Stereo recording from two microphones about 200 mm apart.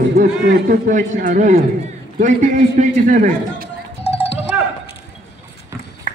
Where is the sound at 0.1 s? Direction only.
50° right (ahead or behind).